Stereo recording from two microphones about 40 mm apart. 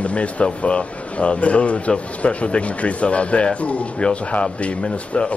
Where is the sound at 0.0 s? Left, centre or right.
Left.